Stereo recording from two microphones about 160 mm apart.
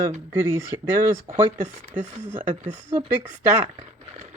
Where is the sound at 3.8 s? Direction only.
45° right (ahead or behind).